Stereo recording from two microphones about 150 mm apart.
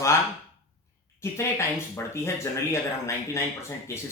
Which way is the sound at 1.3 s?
20° left (ahead or behind).